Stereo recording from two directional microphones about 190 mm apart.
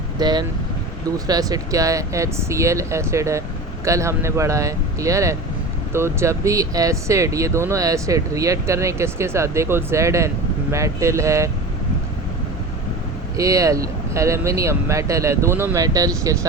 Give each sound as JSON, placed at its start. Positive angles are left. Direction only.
{"t": 0.2, "sound": "speech", "side_deg": -20}
{"t": 13.3, "sound": "speech", "side_deg": -15}